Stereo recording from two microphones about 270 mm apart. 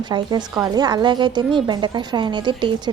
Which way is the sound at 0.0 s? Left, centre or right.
Centre.